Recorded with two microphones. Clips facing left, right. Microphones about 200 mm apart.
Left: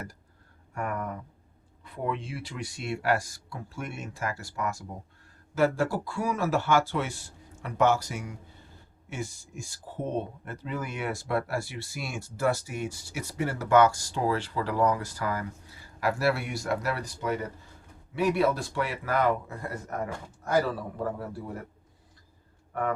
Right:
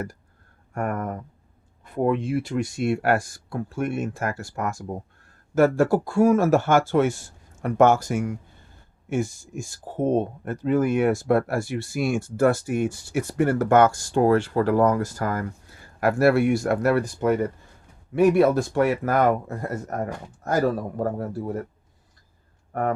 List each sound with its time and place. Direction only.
0.7 s speech: 50° right (ahead or behind)
22.7 s speech: 45° right (ahead or behind)